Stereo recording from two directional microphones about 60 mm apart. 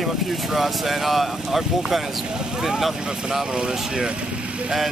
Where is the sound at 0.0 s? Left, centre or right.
Centre.